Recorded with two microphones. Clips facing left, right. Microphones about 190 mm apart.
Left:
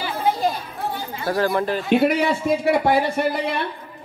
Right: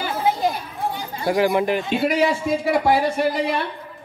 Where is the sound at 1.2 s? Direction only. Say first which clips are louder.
Right 2 dB; 15° right (ahead or behind).